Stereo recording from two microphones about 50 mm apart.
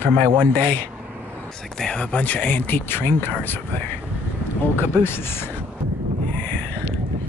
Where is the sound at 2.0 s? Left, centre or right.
Left.